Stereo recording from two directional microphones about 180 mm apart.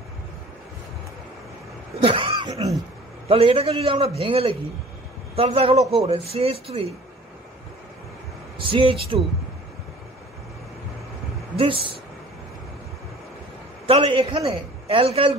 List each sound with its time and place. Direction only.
2.0 s cough: 30° right (ahead or behind)
3.3 s a man's voice: 30° right (ahead or behind)
8.5 s speech: 30° right (ahead or behind)
11.5 s speech: 30° right (ahead or behind)
13.8 s a man's voice: 30° right (ahead or behind)